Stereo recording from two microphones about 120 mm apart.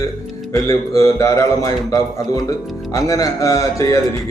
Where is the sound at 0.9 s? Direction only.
25° left (ahead or behind).